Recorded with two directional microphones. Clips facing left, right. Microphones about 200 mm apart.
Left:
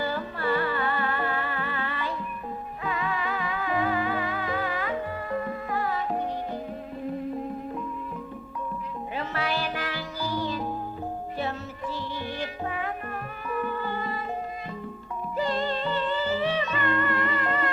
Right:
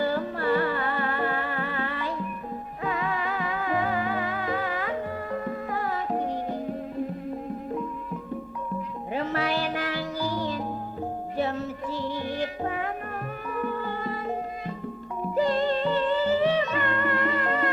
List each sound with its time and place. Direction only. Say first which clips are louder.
0.0 s music: right 3 dB; 45° right (ahead or behind)
9.1 s music: right 3 dB; 45° right (ahead or behind)
15.4 s music: right 4 dB; 45° right (ahead or behind)